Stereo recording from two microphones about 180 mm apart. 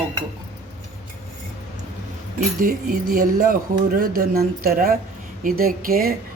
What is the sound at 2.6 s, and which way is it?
Speech, 50° right (ahead or behind).